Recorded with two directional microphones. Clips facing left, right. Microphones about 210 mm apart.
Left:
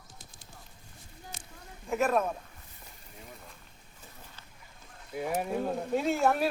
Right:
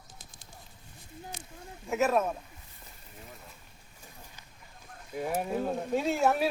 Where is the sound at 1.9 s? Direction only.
5° right (ahead or behind).